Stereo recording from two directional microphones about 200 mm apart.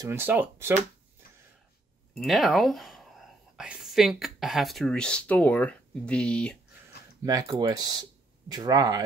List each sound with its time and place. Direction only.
0.0 s speech: 10° right (ahead or behind)
2.1 s speech: centre (ahead or behind)
7.2 s speech: 20° right (ahead or behind)